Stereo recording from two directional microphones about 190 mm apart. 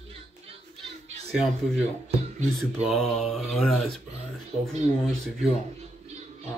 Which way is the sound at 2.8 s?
Centre (ahead or behind).